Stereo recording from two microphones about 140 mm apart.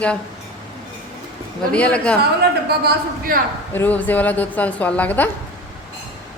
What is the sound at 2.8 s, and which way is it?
Speech, 90° right.